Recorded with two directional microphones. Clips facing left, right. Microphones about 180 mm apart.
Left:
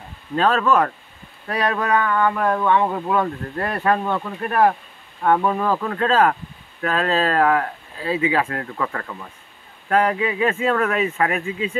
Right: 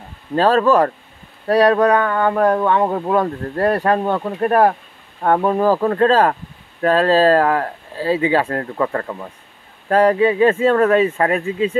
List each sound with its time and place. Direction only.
0.4 s speech: 35° right (ahead or behind)